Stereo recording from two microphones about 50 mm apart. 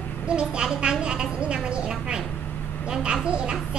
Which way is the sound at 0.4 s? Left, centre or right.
Centre.